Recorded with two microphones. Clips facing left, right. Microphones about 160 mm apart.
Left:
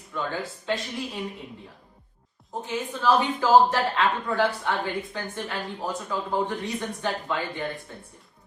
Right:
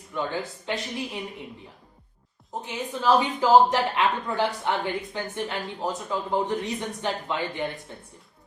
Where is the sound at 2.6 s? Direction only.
15° right (ahead or behind).